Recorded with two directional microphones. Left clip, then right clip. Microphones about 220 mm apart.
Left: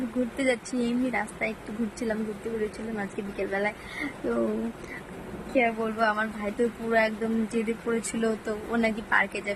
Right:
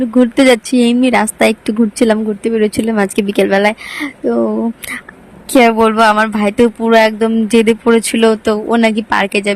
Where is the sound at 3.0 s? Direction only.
45° right (ahead or behind).